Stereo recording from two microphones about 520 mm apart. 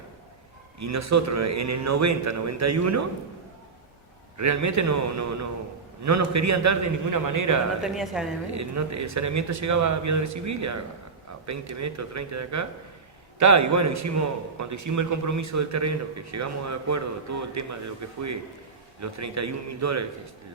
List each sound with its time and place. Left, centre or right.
0.8 s a man's voice: right
4.4 s a man's voice: right
7.8 s a woman's voice: centre
8.5 s a man's voice: right